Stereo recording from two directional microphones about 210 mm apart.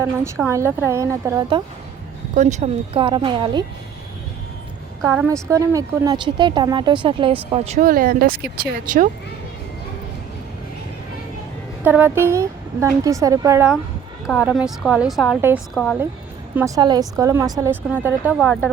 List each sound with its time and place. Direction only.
0.0 s a woman's voice: 15° right (ahead or behind)
2.3 s speech: 35° right (ahead or behind)
5.1 s speech: 10° right (ahead or behind); by 9.0 s 40° right (ahead or behind)
11.8 s a woman's voice: 10° right (ahead or behind)
14.3 s a woman's voice: centre (ahead or behind)
16.6 s a woman's voice: 15° right (ahead or behind)